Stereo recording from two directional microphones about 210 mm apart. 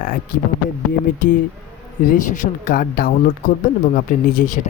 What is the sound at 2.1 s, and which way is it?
Speech, 40° left (ahead or behind).